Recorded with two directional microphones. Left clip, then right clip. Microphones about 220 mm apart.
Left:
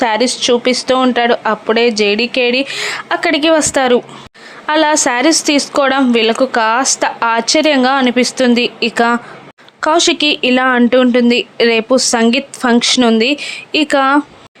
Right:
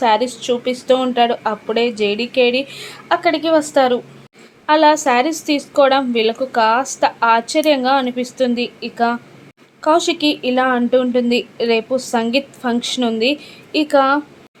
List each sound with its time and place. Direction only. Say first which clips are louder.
0.0 s a woman's voice: left 3 dB; 20° left (ahead or behind)